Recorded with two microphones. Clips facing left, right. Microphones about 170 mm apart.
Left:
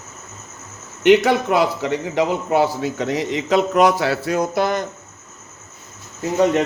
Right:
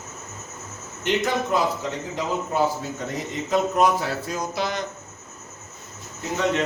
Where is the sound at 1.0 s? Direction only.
75° left (ahead or behind); by 4.9 s 50° left (ahead or behind).